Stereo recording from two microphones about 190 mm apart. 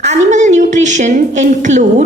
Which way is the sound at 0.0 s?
40° right (ahead or behind).